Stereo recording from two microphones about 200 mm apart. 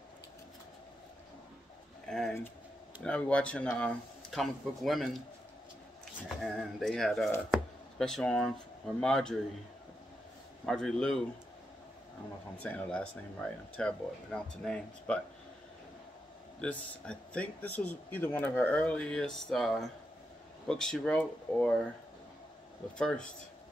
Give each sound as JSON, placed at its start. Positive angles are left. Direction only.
{"t": 2.0, "sound": "speech", "side_deg": 0}
{"t": 6.2, "sound": "speech", "side_deg": 0}
{"t": 10.6, "sound": "speech", "side_deg": 5}
{"t": 12.5, "sound": "speech", "side_deg": 5}
{"t": 16.6, "sound": "speech", "side_deg": 5}
{"t": 22.9, "sound": "speech", "side_deg": 5}